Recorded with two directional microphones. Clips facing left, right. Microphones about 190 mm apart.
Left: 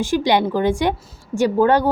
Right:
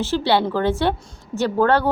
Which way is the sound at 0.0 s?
15° left (ahead or behind).